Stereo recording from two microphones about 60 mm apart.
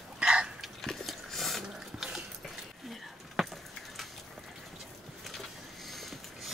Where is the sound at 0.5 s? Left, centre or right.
Centre.